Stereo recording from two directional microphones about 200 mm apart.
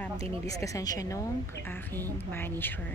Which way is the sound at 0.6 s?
15° left (ahead or behind).